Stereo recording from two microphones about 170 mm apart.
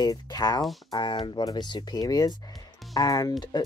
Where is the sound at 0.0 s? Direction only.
25° left (ahead or behind).